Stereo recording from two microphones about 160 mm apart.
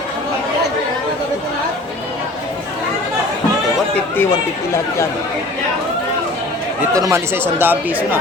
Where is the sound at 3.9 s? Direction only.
10° left (ahead or behind).